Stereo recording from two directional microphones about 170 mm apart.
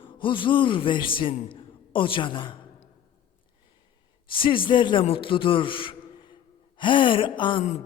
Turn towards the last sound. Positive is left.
turn(degrees=30)  # may be behind; listen again after turning